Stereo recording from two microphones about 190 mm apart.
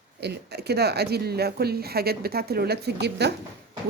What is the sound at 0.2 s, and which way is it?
Speech, 60° right (ahead or behind).